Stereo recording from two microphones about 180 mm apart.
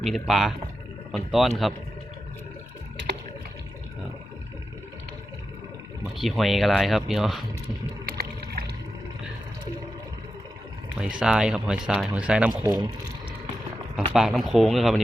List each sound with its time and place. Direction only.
0.0 s speech: centre (ahead or behind)
6.2 s speech: centre (ahead or behind)
8.0 s boat: 55° right (ahead or behind)
10.9 s speech: 5° right (ahead or behind)
13.9 s speech: 5° right (ahead or behind)